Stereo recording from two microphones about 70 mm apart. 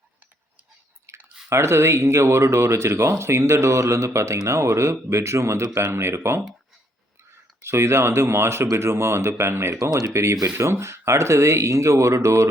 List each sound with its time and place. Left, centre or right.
1.1 s chewing: right
1.5 s speech: right
7.6 s speech: right
9.9 s speech: right